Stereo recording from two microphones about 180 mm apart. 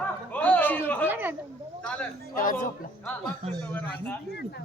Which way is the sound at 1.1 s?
10° right (ahead or behind).